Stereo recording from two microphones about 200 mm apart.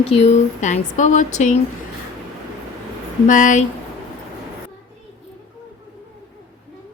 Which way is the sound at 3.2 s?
40° left (ahead or behind).